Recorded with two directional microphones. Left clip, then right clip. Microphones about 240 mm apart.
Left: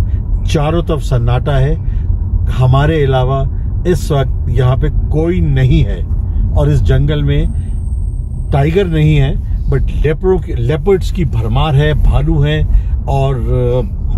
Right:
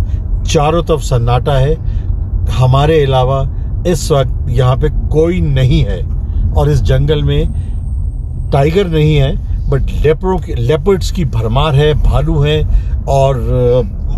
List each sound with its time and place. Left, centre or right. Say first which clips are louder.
0.5 s speech: right 4 dB; right